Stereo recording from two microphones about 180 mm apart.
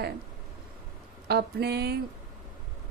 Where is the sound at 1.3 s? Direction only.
65° right (ahead or behind).